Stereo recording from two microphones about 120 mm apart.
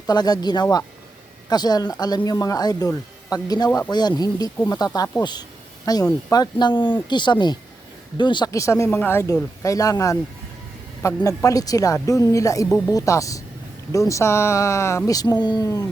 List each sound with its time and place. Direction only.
0.1 s speech: 35° left (ahead or behind)
8.5 s speech: 25° left (ahead or behind)